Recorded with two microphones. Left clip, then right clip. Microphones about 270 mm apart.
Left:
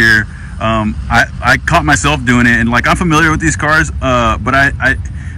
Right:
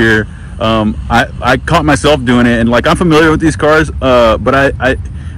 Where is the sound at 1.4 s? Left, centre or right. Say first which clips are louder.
Even; centre.